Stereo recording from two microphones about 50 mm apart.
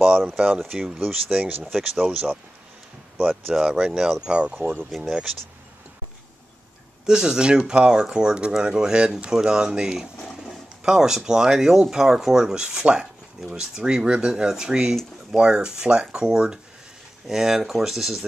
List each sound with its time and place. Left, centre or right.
0.0 s a sound: right
0.7 s speech: centre
1.0 s speech: right
1.6 s speech: centre
3.2 s speech: right
3.8 s speech: centre
4.3 s speech: centre
4.9 s speech: centre
7.1 s speech: centre